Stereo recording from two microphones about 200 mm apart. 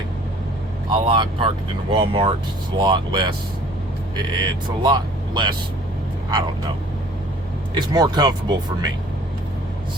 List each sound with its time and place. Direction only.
0.9 s speech: 25° right (ahead or behind)
4.8 s speech: 20° right (ahead or behind)
7.8 s speech: 20° right (ahead or behind)